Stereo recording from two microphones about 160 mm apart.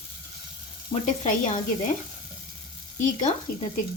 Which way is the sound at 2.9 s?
50° left (ahead or behind).